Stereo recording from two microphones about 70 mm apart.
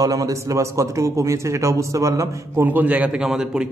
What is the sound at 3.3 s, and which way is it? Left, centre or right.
Speech, centre.